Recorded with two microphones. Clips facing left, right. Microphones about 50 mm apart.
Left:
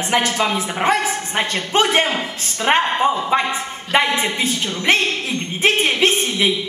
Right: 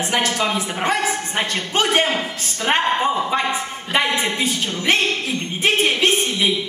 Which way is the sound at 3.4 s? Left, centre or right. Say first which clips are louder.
Even; centre.